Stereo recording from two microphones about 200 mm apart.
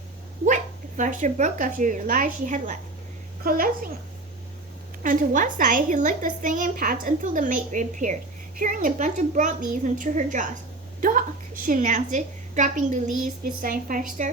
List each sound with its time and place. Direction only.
0.4 s speech: 40° right (ahead or behind)
5.0 s a woman's voice: 40° right (ahead or behind)